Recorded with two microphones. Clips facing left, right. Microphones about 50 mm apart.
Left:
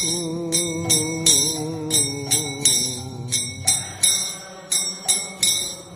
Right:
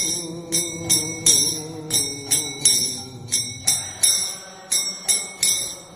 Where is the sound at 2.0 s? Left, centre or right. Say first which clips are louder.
Left 4 dB; left.